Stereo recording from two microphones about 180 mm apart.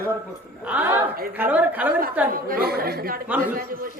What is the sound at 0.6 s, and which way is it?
A woman's voice, 10° right (ahead or behind).